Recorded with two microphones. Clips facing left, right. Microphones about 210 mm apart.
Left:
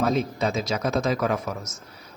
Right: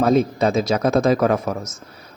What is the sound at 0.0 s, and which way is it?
Speech, 55° right (ahead or behind).